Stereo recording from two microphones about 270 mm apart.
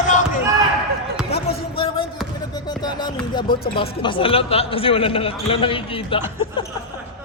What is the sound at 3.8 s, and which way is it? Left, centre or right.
A man's voice, centre.